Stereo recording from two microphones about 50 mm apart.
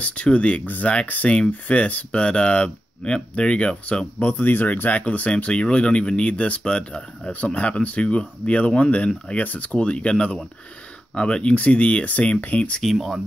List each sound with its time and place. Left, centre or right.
0.0 s speech: left
4.3 s speech: left; by 11.5 s centre
11.5 s speech: left
12.9 s speech: centre